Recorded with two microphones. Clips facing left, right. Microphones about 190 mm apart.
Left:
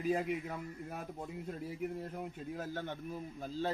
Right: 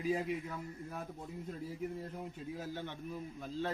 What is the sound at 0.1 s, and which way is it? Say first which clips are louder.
A man's voice: left 2 dB; 60° left (ahead or behind).